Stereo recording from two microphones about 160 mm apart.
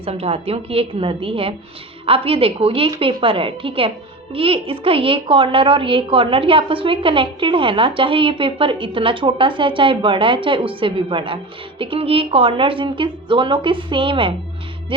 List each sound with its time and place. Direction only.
0.0 s speech: 35° right (ahead or behind)